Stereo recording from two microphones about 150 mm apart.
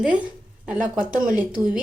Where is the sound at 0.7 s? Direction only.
60° right (ahead or behind).